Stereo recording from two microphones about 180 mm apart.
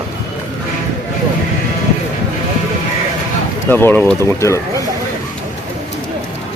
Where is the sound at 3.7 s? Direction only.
10° left (ahead or behind).